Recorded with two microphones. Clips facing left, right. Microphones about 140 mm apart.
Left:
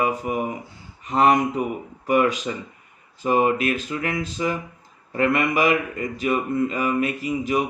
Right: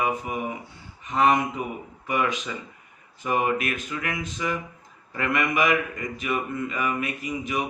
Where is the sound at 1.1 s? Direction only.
35° left (ahead or behind).